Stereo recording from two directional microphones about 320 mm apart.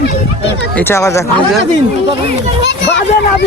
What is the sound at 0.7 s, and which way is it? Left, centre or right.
Speech, centre.